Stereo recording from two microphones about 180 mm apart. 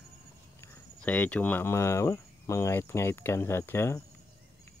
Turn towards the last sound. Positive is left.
turn(degrees=15)  # may be behind; listen again after turning